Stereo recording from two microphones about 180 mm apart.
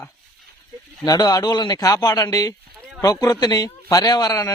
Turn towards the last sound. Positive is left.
turn(degrees=20)  # may be behind; listen again after turning